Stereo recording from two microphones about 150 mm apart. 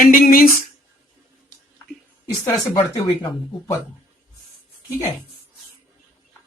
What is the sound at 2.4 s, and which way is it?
Speech, 25° left (ahead or behind).